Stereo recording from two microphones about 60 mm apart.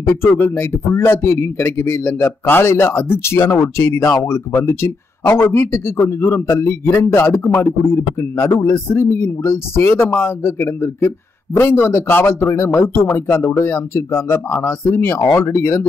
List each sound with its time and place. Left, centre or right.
0.0 s a man's voice: left
10.0 s speech: left
10.4 s a man's voice: left